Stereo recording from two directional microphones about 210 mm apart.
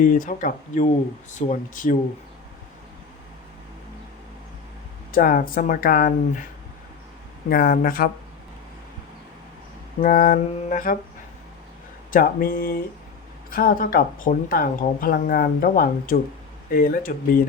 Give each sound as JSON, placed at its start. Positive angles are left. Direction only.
{"t": 0.0, "sound": "mantra", "side_deg": 40}
{"t": 5.1, "sound": "speech", "side_deg": 40}
{"t": 7.5, "sound": "speech", "side_deg": 45}
{"t": 10.0, "sound": "mantra", "side_deg": 40}
{"t": 12.1, "sound": "speech", "side_deg": 45}